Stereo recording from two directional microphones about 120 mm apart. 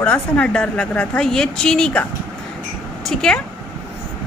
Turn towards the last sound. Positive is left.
turn(degrees=5)  # may be behind; listen again after turning